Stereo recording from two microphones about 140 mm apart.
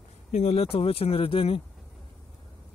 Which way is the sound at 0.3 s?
55° left (ahead or behind).